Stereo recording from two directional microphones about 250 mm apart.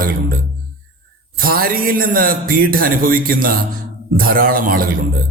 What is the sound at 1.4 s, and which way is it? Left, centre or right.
A man's voice, right.